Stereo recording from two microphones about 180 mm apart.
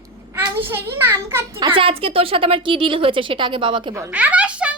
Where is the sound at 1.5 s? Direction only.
30° right (ahead or behind).